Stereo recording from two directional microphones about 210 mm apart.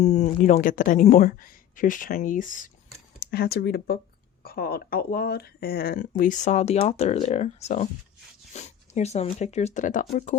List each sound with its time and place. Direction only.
0.0 s speech: 35° left (ahead or behind)